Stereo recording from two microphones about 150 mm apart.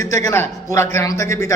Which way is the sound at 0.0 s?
20° left (ahead or behind).